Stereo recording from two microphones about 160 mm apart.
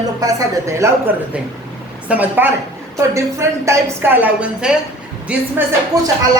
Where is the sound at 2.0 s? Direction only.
10° right (ahead or behind).